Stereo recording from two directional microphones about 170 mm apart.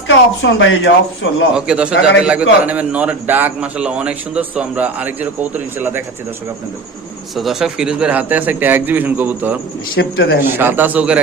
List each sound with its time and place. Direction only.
0.1 s a woman's voice: 90° left
1.5 s a man's voice: 5° right (ahead or behind)
7.3 s a man's voice: centre (ahead or behind)
10.0 s speech: 65° left (ahead or behind)
10.6 s a man's voice: 10° right (ahead or behind)